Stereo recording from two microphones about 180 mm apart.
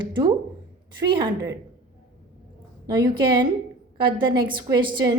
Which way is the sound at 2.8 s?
20° right (ahead or behind).